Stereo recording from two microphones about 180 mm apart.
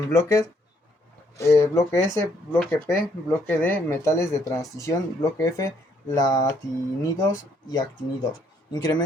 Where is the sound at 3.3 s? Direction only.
10° left (ahead or behind).